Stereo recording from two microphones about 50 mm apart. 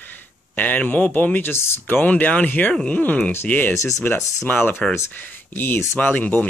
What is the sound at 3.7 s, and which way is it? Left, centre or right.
Speech, left.